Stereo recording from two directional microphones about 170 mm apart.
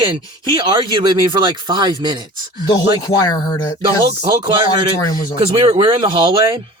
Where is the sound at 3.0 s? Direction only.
20° left (ahead or behind).